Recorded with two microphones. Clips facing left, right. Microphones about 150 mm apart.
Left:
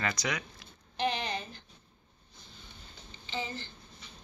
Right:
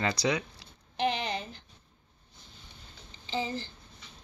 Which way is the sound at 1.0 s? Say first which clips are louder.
Right 2 dB; 20° right (ahead or behind).